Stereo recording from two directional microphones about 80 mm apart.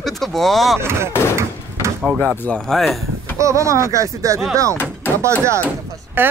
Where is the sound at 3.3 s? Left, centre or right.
Right.